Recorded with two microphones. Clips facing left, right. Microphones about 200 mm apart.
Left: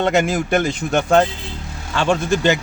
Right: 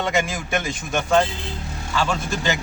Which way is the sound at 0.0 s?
60° left (ahead or behind).